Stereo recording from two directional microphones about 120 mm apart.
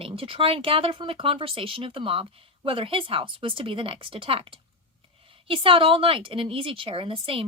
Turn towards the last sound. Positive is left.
turn(degrees=-50)  # may be behind; listen again after turning